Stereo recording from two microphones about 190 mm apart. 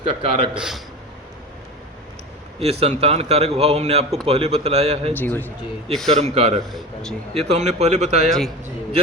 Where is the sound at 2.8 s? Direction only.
30° right (ahead or behind).